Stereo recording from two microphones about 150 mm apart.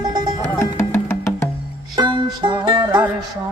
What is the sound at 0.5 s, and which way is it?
Music, 15° left (ahead or behind).